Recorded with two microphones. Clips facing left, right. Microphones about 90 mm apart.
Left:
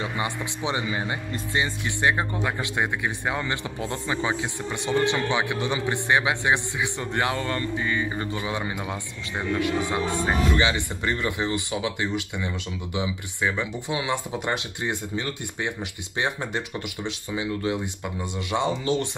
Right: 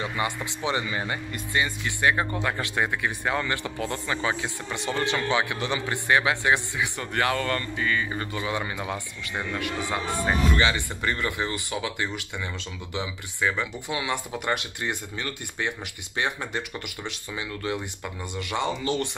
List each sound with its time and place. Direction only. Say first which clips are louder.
0.0 s speech: even; 20° left (ahead or behind)